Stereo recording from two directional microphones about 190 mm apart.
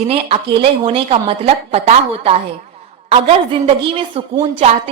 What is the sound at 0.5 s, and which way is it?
A woman's voice, 30° right (ahead or behind).